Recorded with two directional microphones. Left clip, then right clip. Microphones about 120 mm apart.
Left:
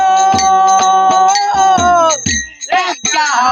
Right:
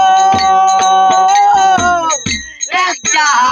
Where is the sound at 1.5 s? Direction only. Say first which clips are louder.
Right 1 dB; 30° right (ahead or behind).